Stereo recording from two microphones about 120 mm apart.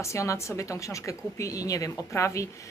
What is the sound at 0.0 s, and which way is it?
Speech, 25° left (ahead or behind).